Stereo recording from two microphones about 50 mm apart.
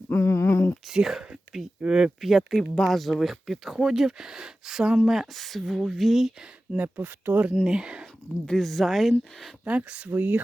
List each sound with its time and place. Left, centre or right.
0.1 s a sound: left
1.0 s speech: centre
2.2 s speech: centre
6.7 s speech: right
7.0 s speech: right
7.6 s speech: centre
8.4 s speech: centre
9.6 s speech: right